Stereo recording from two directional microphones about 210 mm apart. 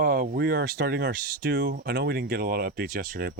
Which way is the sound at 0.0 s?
45° right (ahead or behind).